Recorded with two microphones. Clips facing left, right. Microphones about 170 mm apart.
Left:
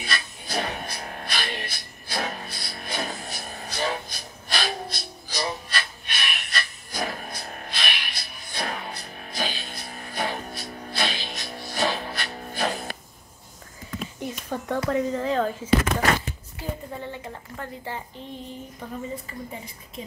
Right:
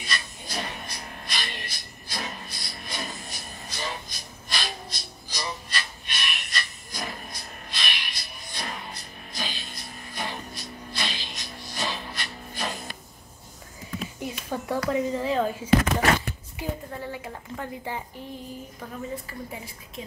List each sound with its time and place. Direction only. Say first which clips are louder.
0.0 s music: left 2 dB; 60° left (ahead or behind)
14.2 s a sound: left 1 dB; 5° right (ahead or behind)
14.9 s a woman's voice: left 1 dB; 5° right (ahead or behind)
16.6 s a sound: right 1 dB; 15° right (ahead or behind)
16.9 s a woman's voice: even; 5° right (ahead or behind)
18.8 s a woman's voice: left 1 dB; 5° right (ahead or behind)